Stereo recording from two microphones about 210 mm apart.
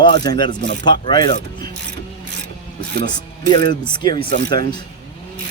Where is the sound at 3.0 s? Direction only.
20° left (ahead or behind).